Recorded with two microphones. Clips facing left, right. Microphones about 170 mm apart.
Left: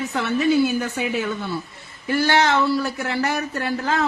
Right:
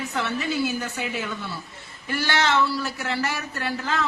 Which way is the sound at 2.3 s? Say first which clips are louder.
Left 3 dB; 45° left (ahead or behind).